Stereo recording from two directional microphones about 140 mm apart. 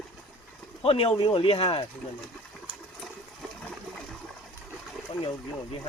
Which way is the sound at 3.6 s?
5° left (ahead or behind).